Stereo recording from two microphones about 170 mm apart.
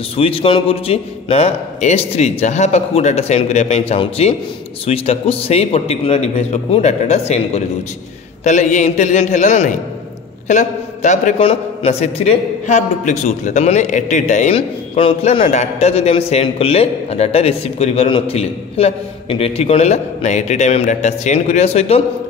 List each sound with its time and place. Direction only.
0.1 s a man's voice: 35° left (ahead or behind)